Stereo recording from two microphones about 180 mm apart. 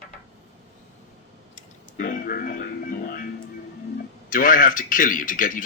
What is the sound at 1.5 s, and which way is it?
Music, 50° left (ahead or behind).